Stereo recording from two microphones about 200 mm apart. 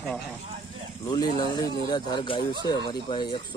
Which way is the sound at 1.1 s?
20° left (ahead or behind).